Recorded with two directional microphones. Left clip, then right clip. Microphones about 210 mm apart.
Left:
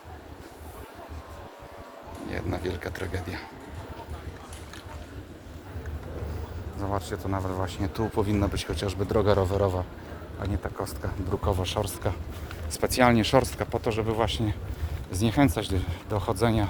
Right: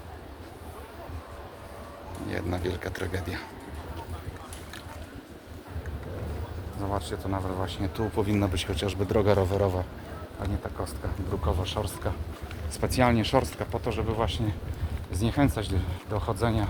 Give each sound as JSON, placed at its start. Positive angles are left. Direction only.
{"t": 2.3, "sound": "speech", "side_deg": 0}
{"t": 6.7, "sound": "speech", "side_deg": 40}
{"t": 10.6, "sound": "speech", "side_deg": 45}